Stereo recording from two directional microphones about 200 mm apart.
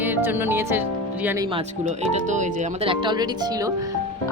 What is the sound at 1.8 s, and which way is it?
Speech, 35° right (ahead or behind).